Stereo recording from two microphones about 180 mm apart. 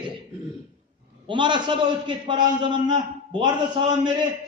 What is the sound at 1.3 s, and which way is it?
A man's voice, 25° right (ahead or behind).